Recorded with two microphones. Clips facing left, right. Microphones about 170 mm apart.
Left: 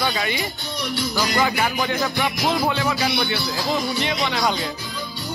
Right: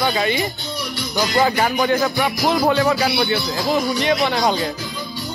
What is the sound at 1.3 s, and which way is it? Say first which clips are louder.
Music: right 6 dB; 40° right (ahead or behind).